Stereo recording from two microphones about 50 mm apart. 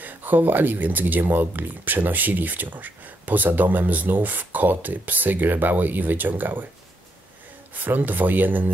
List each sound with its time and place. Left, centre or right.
0.0 s speech: right
7.7 s speech: right